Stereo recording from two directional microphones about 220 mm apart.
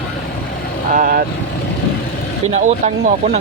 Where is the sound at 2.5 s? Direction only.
30° right (ahead or behind).